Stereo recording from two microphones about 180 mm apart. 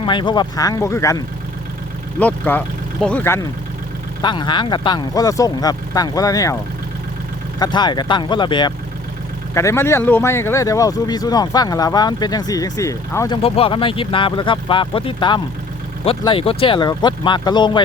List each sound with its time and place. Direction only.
0.0 s speech: 25° left (ahead or behind)
4.2 s speech: 25° left (ahead or behind)
7.6 s speech: 25° left (ahead or behind)
9.6 s speech: 15° left (ahead or behind)